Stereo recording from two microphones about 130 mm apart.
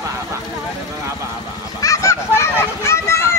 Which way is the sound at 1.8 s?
25° left (ahead or behind).